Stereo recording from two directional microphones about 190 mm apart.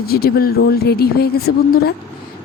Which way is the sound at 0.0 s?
55° left (ahead or behind).